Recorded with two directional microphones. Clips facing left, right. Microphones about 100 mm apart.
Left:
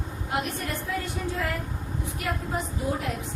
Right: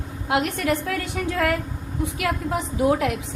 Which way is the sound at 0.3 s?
85° right.